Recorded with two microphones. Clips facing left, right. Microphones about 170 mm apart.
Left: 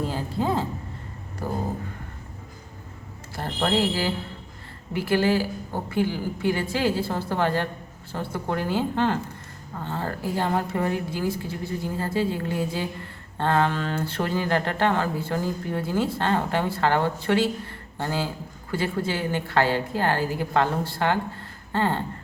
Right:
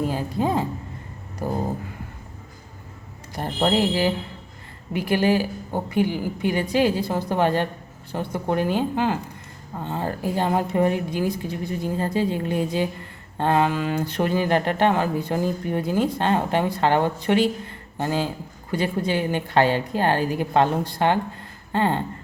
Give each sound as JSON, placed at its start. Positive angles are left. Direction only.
{"t": 0.0, "sound": "a woman's voice", "side_deg": -15}
{"t": 3.3, "sound": "a woman's voice", "side_deg": -20}